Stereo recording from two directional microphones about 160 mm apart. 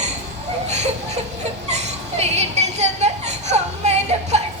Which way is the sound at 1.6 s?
45° right (ahead or behind).